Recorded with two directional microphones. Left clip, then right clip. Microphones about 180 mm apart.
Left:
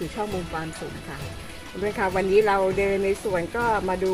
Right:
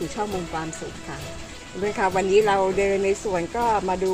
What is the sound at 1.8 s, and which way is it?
Speech, 25° right (ahead or behind).